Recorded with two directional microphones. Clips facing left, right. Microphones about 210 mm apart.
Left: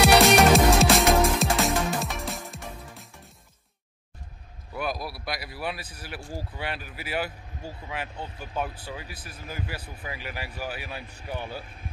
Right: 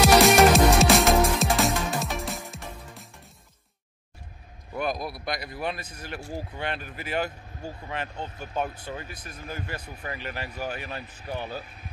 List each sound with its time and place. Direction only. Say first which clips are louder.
0.0 s music: right 1 dB; centre (ahead or behind)
4.9 s speech: right 2 dB; 20° right (ahead or behind)
5.2 s speech: right 2 dB; 5° left (ahead or behind)